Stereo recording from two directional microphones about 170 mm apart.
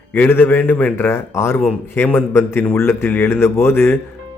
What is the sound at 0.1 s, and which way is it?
A man's voice, 10° left (ahead or behind).